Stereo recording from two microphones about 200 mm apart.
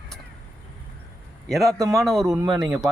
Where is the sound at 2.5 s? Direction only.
Centre (ahead or behind).